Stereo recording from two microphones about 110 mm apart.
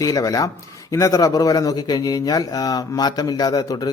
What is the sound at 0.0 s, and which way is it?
Speech, 35° left (ahead or behind).